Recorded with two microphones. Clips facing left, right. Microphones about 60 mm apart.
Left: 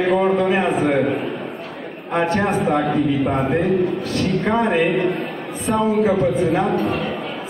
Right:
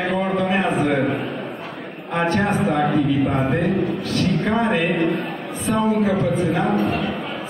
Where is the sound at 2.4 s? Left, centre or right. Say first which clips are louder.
Left 1 dB; centre.